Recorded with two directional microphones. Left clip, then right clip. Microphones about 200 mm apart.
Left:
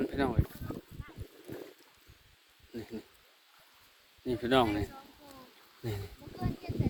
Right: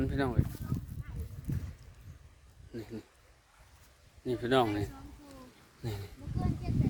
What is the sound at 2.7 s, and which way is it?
Speech, centre (ahead or behind).